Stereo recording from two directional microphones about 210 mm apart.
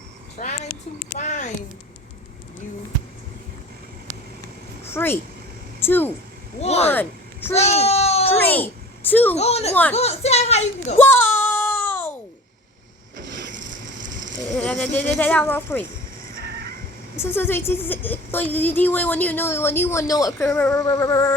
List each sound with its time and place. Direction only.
0.3 s speech: 30° left (ahead or behind)
4.9 s a woman's voice: 10° left (ahead or behind)
6.6 s speech: 30° left (ahead or behind)
6.8 s speech: 10° left (ahead or behind)
7.5 s speech: 30° left (ahead or behind)
8.3 s a sound: 10° left (ahead or behind)
9.3 s speech: 30° left (ahead or behind)
11.0 s child singing: 10° left (ahead or behind)
14.5 s a woman's voice: 5° left (ahead or behind)
16.4 s vehicle: 45° right (ahead or behind)
17.2 s a woman's voice: 10° left (ahead or behind)